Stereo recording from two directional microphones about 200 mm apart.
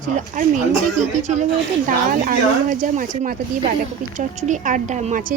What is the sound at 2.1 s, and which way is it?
A woman's voice, 40° right (ahead or behind).